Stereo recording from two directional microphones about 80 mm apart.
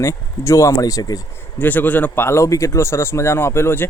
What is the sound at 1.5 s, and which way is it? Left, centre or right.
Speech, left.